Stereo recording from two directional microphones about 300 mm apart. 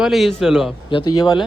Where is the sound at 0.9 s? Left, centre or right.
Centre.